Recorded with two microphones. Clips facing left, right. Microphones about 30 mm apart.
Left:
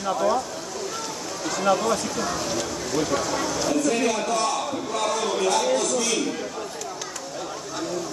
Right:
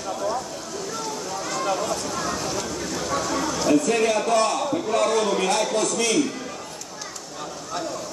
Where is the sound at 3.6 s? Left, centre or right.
Right.